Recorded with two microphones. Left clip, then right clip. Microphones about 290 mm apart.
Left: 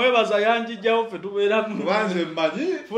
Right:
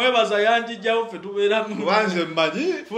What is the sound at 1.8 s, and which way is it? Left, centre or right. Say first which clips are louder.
Speech: right 2 dB; right.